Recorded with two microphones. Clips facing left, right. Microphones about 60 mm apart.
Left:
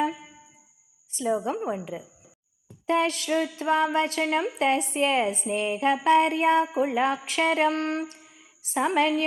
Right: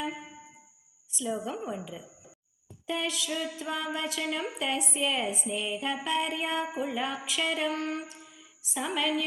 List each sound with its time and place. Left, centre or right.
1.1 s a woman's voice: left
2.8 s speech: left
8.2 s a sound: left
8.6 s speech: left